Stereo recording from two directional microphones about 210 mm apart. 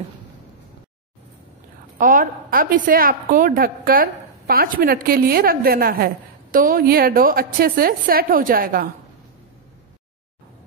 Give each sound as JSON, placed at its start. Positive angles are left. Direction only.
{"t": 2.0, "sound": "a woman's voice", "side_deg": -40}